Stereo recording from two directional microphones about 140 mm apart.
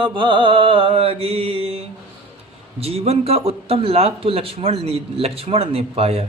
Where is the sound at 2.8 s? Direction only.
45° right (ahead or behind).